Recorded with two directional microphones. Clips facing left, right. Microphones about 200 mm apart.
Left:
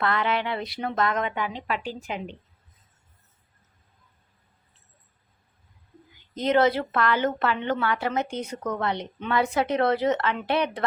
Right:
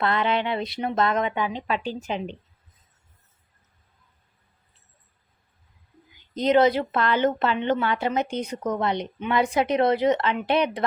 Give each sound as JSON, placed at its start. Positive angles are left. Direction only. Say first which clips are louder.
{"t": 0.0, "sound": "a woman's voice", "louder": "right 2 dB", "side_deg": -25}
{"t": 6.3, "sound": "a woman's voice", "louder": "right 2 dB", "side_deg": -15}